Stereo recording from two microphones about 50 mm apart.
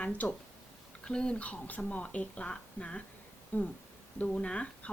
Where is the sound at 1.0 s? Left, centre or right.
Centre.